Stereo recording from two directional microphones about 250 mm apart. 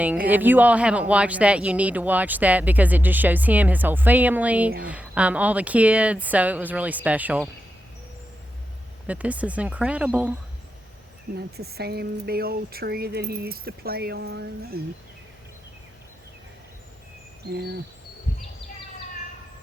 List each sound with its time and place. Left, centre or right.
0.0 s speech: centre
9.0 s speech: centre
11.3 s speech: right
17.5 s speech: right